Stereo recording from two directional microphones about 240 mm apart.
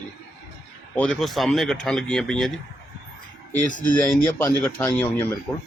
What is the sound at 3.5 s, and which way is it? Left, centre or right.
Speech, left.